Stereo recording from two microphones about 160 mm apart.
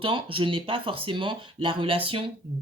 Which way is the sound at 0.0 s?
35° right (ahead or behind).